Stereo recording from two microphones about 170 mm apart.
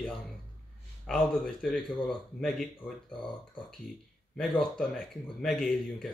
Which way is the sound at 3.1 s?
30° left (ahead or behind).